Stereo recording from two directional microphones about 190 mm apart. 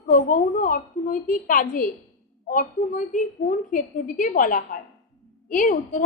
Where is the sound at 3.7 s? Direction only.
45° left (ahead or behind).